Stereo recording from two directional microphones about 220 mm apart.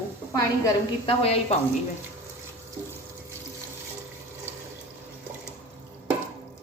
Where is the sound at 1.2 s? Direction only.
25° left (ahead or behind).